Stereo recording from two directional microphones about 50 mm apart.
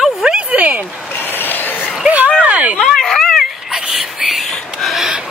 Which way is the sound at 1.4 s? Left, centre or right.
Left.